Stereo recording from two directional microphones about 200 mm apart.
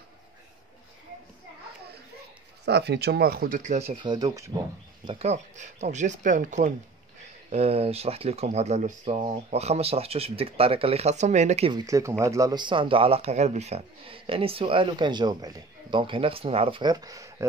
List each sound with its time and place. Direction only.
2.6 s speech: 55° right (ahead or behind); by 4.5 s 20° right (ahead or behind)
5.0 s speech: 35° right (ahead or behind)
11.7 s speech: 15° right (ahead or behind)